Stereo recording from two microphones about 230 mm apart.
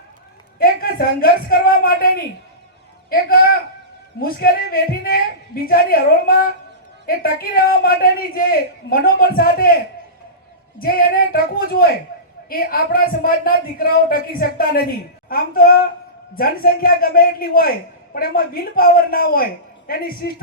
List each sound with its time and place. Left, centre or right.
0.6 s a man's voice: left